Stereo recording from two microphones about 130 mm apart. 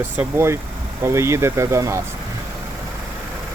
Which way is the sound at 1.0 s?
20° right (ahead or behind).